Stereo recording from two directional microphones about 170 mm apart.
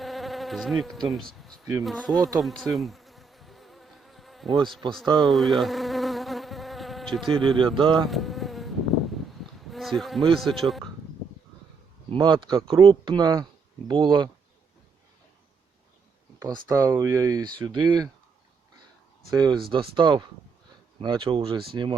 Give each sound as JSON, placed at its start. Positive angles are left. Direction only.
{"t": 0.0, "sound": "insect", "side_deg": 0}
{"t": 1.8, "sound": "speech", "side_deg": 0}
{"t": 2.4, "sound": "bee", "side_deg": 0}
{"t": 5.2, "sound": "insect", "side_deg": 0}
{"t": 7.4, "sound": "speech", "side_deg": -30}
{"t": 8.0, "sound": "insect", "side_deg": 0}
{"t": 9.6, "sound": "bee", "side_deg": 0}
{"t": 10.3, "sound": "speech", "side_deg": 0}
{"t": 12.1, "sound": "speech", "side_deg": -25}
{"t": 16.4, "sound": "speech", "side_deg": -20}
{"t": 19.3, "sound": "speech", "side_deg": -25}